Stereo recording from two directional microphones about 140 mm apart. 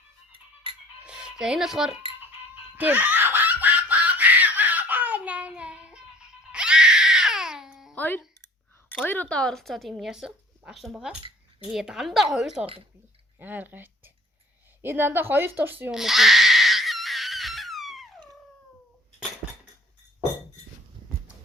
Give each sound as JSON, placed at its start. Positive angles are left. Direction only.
{"t": 0.7, "sound": "music", "side_deg": -40}
{"t": 1.0, "sound": "cutlery", "side_deg": -5}
{"t": 2.7, "sound": "laughter", "side_deg": -10}
{"t": 7.9, "sound": "speech", "side_deg": 15}
{"t": 12.6, "sound": "speech", "side_deg": -40}
{"t": 13.4, "sound": "speech", "side_deg": -15}
{"t": 14.8, "sound": "a sound", "side_deg": -15}